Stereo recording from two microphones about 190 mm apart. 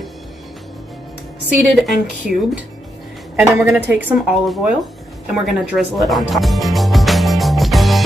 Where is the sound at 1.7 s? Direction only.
Centre (ahead or behind).